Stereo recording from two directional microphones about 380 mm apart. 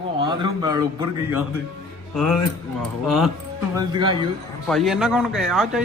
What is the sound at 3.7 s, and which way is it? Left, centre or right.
Speech, centre.